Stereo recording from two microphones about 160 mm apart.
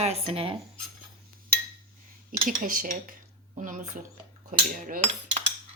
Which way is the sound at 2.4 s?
60° right (ahead or behind).